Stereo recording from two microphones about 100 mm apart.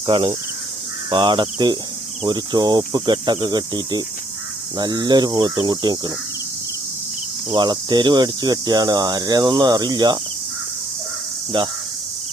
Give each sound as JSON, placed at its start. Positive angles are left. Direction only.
{"t": 0.0, "sound": "insect", "side_deg": -60}
{"t": 1.1, "sound": "cricket", "side_deg": -50}
{"t": 7.5, "sound": "cricket", "side_deg": -45}
{"t": 11.5, "sound": "cricket", "side_deg": -50}